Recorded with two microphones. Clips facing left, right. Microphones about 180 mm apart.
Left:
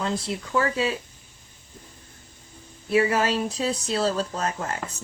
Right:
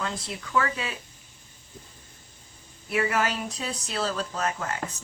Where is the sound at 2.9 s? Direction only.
30° left (ahead or behind).